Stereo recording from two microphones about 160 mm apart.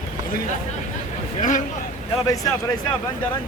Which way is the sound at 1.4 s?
50° left (ahead or behind).